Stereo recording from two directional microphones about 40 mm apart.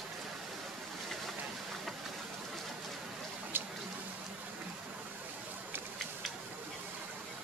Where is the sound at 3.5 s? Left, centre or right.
Right.